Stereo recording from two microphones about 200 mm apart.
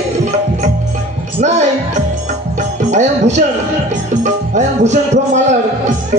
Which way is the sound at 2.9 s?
35° right (ahead or behind).